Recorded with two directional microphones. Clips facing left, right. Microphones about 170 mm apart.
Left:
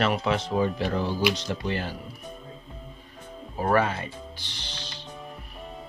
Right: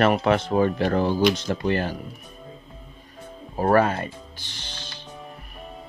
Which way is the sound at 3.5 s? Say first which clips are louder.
Right 4 dB; 45° right (ahead or behind).